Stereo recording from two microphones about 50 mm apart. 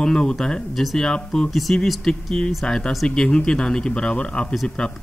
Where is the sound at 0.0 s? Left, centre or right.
Centre.